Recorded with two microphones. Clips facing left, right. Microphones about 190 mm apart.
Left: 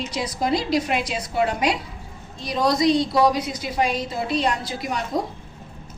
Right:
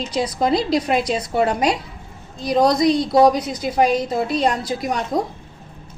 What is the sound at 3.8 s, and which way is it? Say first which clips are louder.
A woman's voice: right 6 dB; 45° right (ahead or behind).